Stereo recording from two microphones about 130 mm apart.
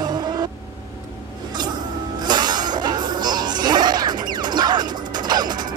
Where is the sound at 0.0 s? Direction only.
30° right (ahead or behind).